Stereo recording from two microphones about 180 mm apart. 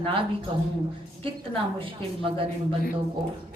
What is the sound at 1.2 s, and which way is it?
Speech, 30° right (ahead or behind).